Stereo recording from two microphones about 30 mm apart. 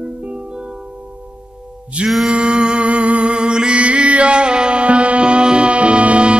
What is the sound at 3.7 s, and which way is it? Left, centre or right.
Music, right.